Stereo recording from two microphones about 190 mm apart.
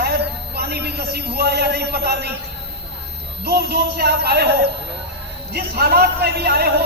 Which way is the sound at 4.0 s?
60° right (ahead or behind).